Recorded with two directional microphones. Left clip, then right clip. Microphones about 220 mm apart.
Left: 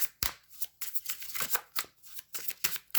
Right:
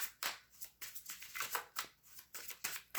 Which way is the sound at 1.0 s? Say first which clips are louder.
Left 6 dB; 45° left (ahead or behind).